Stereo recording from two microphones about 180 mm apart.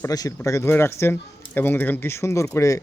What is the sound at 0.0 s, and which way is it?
Speech, 20° left (ahead or behind).